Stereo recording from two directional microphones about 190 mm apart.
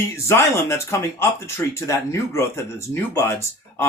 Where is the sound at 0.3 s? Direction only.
15° left (ahead or behind).